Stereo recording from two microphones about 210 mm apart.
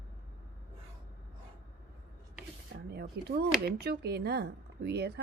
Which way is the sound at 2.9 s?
50° right (ahead or behind).